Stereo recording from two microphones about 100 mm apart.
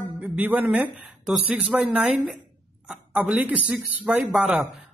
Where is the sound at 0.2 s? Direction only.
15° right (ahead or behind).